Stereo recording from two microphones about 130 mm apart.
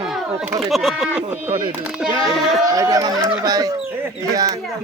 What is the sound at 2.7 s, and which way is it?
Speech, 25° right (ahead or behind).